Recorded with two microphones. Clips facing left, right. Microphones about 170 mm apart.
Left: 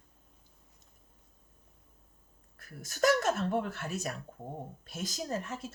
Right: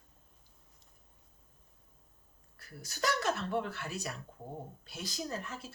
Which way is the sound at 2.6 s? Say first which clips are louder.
Left 7 dB; 50° left (ahead or behind).